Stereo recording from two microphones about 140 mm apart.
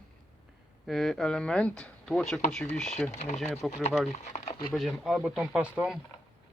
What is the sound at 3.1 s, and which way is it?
Speech, 55° left (ahead or behind).